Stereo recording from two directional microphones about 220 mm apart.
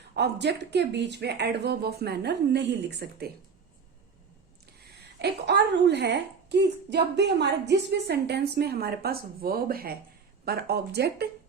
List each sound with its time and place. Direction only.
0.2 s speech: 50° right (ahead or behind)
5.2 s speech: 50° right (ahead or behind)